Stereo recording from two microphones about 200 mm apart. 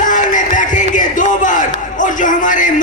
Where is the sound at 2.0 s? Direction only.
40° left (ahead or behind).